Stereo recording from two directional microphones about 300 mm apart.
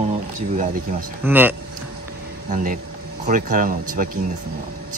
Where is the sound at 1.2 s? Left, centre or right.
Centre.